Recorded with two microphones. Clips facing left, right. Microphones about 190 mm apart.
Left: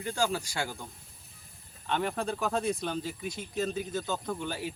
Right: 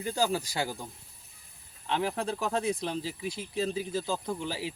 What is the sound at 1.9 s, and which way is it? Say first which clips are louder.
Speech: right 1 dB; centre (ahead or behind).